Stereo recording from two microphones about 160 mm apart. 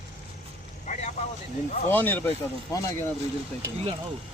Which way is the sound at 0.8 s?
45° left (ahead or behind).